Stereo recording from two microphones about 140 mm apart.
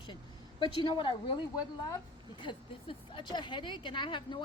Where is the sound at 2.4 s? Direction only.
35° left (ahead or behind).